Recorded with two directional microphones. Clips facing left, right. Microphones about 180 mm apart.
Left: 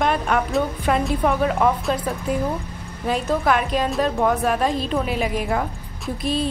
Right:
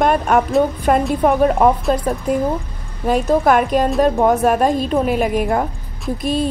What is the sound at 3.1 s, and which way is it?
Speech, 45° right (ahead or behind).